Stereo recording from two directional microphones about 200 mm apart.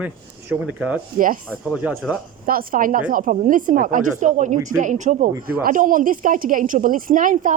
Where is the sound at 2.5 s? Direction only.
45° right (ahead or behind).